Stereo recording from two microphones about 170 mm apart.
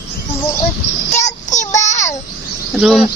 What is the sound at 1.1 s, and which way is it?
Child singing, 45° left (ahead or behind).